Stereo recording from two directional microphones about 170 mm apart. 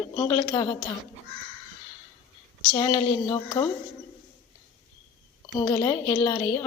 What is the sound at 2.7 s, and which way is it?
Speech, 30° left (ahead or behind).